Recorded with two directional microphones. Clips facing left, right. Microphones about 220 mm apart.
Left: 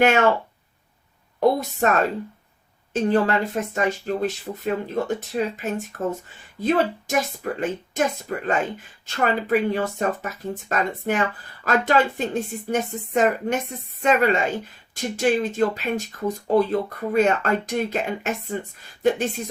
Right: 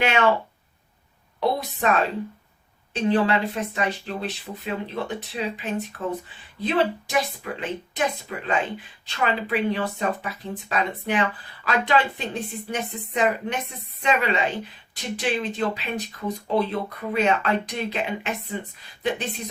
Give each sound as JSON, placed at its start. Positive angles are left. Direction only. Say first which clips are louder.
{"t": 0.0, "sound": "speech", "louder": "left 4 dB", "side_deg": 45}
{"t": 1.4, "sound": "speech", "louder": "left 5 dB", "side_deg": 45}